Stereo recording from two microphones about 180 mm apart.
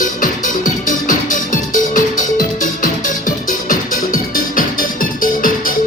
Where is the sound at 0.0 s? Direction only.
50° left (ahead or behind).